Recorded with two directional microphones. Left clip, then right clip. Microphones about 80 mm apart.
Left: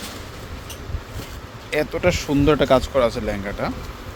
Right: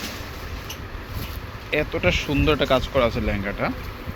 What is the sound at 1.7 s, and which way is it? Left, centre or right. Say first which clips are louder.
Speech: left 2 dB; left.